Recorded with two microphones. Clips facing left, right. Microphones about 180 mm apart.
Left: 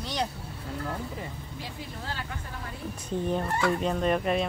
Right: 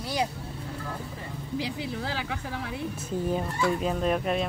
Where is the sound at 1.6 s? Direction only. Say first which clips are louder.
Right 7 dB; 90° right.